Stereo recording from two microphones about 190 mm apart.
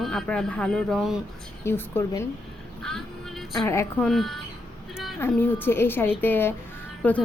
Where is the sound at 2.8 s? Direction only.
5° left (ahead or behind).